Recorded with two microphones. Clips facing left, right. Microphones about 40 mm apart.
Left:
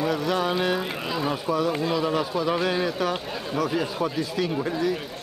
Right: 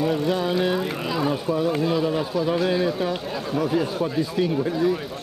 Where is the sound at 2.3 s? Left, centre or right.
Left.